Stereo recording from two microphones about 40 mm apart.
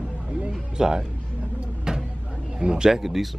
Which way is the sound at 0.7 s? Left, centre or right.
Centre.